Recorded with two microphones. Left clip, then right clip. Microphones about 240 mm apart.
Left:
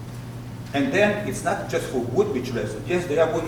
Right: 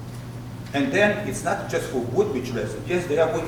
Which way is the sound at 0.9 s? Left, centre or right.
Centre.